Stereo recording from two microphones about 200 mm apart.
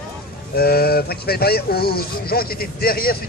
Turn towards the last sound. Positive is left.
turn(degrees=50)  # may be behind; listen again after turning